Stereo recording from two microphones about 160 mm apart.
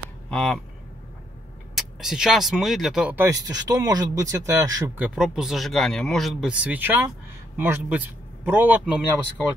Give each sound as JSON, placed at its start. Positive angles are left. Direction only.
{"t": 0.3, "sound": "speech", "side_deg": 5}
{"t": 1.8, "sound": "speech", "side_deg": -5}
{"t": 3.3, "sound": "speech", "side_deg": -25}
{"t": 4.9, "sound": "a man's voice", "side_deg": -5}